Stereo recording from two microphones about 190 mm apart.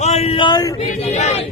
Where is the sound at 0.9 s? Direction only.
40° left (ahead or behind).